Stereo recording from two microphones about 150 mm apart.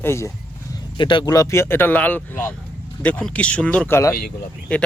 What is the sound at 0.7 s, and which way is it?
Speech, 35° left (ahead or behind).